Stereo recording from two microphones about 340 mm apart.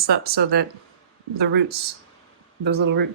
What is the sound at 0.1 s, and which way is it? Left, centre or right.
Speech, right.